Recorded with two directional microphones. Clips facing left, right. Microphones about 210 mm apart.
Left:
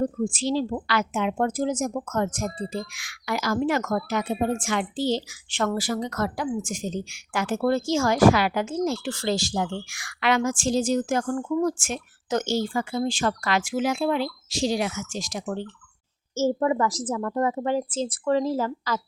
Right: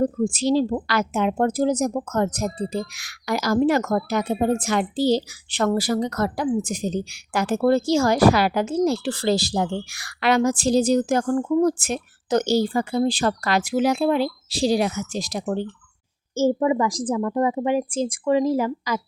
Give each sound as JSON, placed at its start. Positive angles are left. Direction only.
{"t": 0.0, "sound": "speech", "side_deg": -40}
{"t": 16.3, "sound": "a woman's voice", "side_deg": -15}